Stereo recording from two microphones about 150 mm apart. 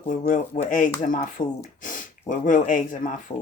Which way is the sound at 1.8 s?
60° left (ahead or behind).